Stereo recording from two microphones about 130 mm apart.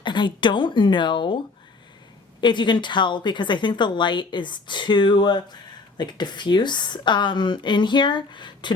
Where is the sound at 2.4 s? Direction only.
35° left (ahead or behind).